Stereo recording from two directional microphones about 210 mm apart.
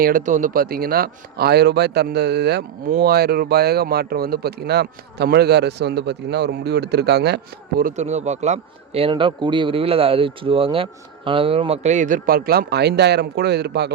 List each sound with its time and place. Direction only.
0.0 s speech: 40° right (ahead or behind)